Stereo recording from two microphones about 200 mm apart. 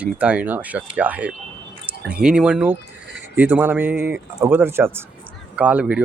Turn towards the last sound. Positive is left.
turn(degrees=-5)  # may be behind; listen again after turning